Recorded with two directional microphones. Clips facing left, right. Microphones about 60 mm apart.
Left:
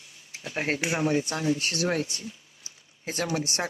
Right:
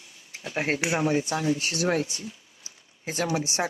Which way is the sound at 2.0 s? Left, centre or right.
Centre.